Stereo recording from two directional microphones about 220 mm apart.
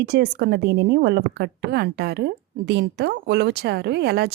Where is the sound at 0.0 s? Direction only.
50° right (ahead or behind).